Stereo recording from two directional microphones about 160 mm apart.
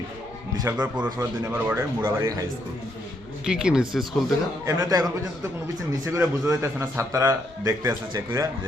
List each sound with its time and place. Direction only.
0.6 s speech: 25° right (ahead or behind)
0.9 s speech: 10° right (ahead or behind)
3.4 s speech: 5° right (ahead or behind)
4.6 s speech: 20° right (ahead or behind)
6.1 s speech: 20° right (ahead or behind)